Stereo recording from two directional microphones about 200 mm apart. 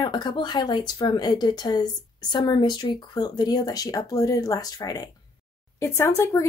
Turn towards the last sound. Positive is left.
turn(degrees=15)  # may be behind; listen again after turning